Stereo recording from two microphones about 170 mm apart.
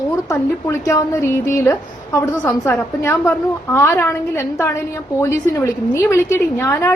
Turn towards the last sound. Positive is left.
turn(degrees=15)  # may be behind; listen again after turning